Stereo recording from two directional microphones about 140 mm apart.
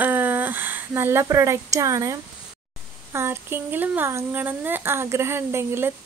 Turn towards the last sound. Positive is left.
turn(degrees=-15)  # may be behind; listen again after turning